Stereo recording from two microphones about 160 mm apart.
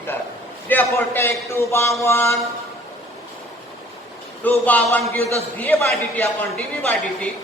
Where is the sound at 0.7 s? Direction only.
10° left (ahead or behind).